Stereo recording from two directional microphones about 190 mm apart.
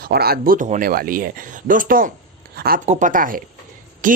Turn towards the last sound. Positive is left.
turn(degrees=-45)  # may be behind; listen again after turning